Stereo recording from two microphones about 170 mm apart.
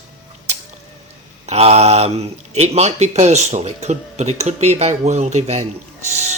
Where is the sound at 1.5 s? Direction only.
40° right (ahead or behind).